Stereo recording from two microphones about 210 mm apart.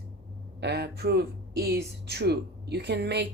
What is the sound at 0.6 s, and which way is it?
Speech, 50° right (ahead or behind).